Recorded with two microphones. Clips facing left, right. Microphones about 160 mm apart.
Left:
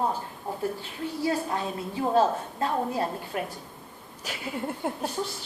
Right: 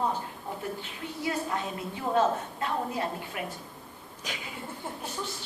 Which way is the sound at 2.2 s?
35° left (ahead or behind).